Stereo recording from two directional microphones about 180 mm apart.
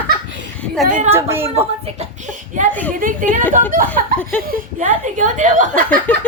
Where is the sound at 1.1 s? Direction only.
15° right (ahead or behind).